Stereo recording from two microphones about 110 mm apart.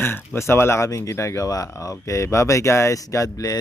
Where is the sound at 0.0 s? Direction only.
20° left (ahead or behind).